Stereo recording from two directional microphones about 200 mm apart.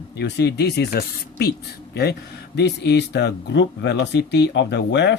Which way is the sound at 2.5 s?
55° left (ahead or behind).